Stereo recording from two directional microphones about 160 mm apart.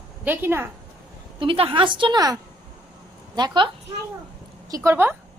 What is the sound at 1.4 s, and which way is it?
A woman's voice, 35° right (ahead or behind).